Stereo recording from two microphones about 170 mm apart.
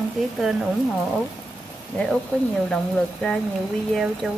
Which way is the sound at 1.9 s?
5° left (ahead or behind).